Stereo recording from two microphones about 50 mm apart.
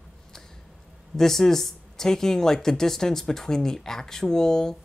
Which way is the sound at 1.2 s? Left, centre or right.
Centre.